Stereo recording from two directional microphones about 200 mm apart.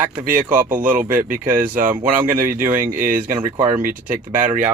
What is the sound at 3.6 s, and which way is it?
Speech, 40° right (ahead or behind).